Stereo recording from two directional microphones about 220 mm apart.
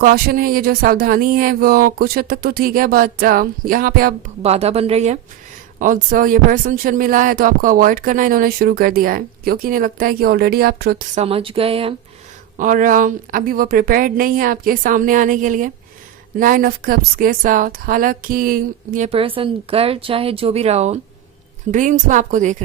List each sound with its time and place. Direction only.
0.0 s speech: 40° right (ahead or behind)
4.4 s speech: 30° right (ahead or behind); by 11.0 s 45° right (ahead or behind)
11.1 s speech: 25° right (ahead or behind)
12.5 s speech: 35° right (ahead or behind)